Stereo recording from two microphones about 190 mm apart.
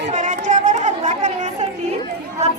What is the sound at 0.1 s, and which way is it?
Chatter, 40° right (ahead or behind).